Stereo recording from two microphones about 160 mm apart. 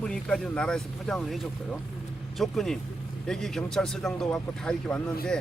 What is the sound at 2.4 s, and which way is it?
Speech, centre (ahead or behind).